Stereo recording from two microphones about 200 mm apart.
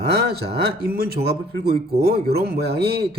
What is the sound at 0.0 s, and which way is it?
A man's voice, 55° right (ahead or behind).